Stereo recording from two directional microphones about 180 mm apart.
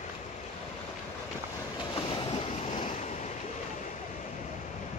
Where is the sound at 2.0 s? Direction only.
30° left (ahead or behind).